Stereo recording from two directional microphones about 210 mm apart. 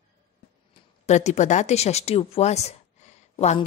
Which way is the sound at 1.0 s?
35° left (ahead or behind).